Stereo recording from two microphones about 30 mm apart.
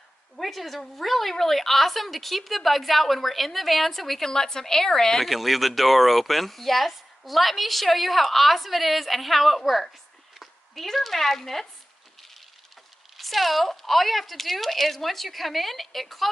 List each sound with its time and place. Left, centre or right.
0.4 s speech: centre
5.2 s speech: centre
13.2 s speech: centre